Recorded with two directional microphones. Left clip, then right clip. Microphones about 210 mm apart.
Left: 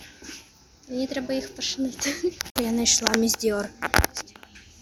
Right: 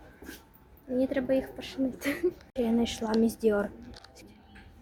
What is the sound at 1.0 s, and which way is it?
A woman's voice, 10° right (ahead or behind).